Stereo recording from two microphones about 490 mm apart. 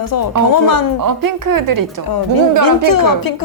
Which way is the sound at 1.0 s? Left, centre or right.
Right.